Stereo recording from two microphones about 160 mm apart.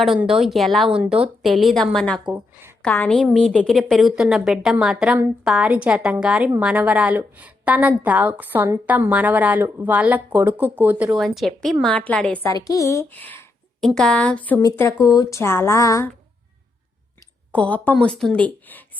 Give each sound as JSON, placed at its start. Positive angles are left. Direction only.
{"t": 0.0, "sound": "a woman's voice", "side_deg": 0}
{"t": 12.5, "sound": "a woman's voice", "side_deg": 20}
{"t": 14.6, "sound": "speech", "side_deg": 20}
{"t": 17.5, "sound": "a woman's voice", "side_deg": 10}